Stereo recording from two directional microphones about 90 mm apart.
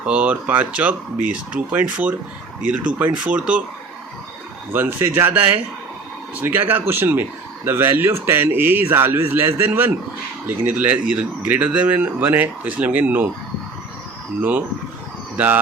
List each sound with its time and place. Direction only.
0.0 s speech: 15° right (ahead or behind)
4.7 s speech: 25° right (ahead or behind)